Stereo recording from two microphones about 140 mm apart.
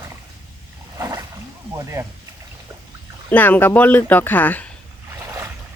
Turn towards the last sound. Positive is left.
turn(degrees=10)  # may be behind; listen again after turning